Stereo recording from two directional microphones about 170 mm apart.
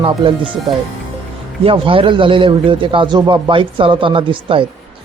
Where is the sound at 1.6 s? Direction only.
30° right (ahead or behind).